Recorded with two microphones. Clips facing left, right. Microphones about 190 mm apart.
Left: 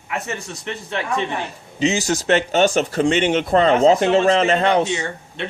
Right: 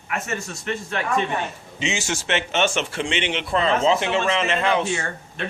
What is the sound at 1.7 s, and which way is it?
Speech, 35° left (ahead or behind).